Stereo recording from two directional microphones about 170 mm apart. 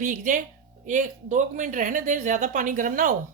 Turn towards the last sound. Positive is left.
turn(degrees=-50)  # may be behind; listen again after turning